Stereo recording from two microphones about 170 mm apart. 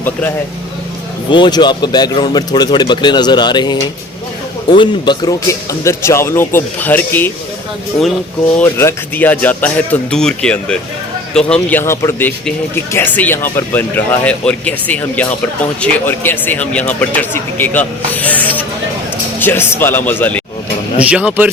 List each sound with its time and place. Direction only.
0.0 s speech: 10° left (ahead or behind)
1.3 s speech: 25° left (ahead or behind)
4.8 s speech: 25° left (ahead or behind)
8.5 s speech: 15° left (ahead or behind)
21.0 s speech: 5° right (ahead or behind)